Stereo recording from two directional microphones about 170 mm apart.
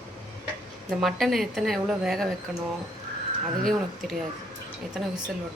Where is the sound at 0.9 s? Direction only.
Centre (ahead or behind).